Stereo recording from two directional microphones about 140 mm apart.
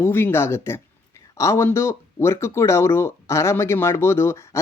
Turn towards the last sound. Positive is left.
turn(degrees=20)  # may be behind; listen again after turning